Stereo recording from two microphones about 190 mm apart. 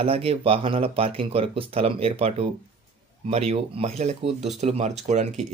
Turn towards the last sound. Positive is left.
turn(degrees=-35)  # may be behind; listen again after turning